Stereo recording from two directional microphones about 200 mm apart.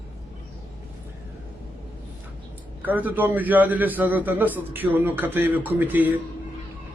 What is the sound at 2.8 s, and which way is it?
A man's voice, 10° right (ahead or behind).